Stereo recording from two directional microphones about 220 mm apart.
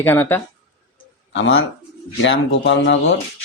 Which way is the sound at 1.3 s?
60° left (ahead or behind).